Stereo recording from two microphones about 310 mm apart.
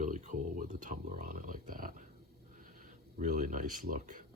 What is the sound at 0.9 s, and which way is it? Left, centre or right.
Speech, right.